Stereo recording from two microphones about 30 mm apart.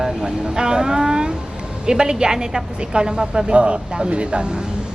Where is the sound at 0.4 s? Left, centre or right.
Right.